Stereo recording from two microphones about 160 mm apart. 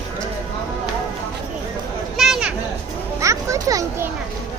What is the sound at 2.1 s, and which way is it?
Children playing, centre (ahead or behind).